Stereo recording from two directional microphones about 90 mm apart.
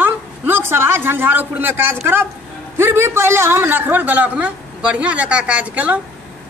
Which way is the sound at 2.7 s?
30° right (ahead or behind).